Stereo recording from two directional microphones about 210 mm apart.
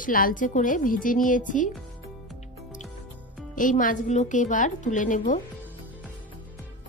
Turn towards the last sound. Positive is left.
turn(degrees=40)  # may be behind; listen again after turning